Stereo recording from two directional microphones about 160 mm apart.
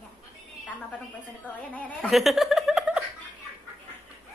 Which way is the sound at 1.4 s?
10° left (ahead or behind).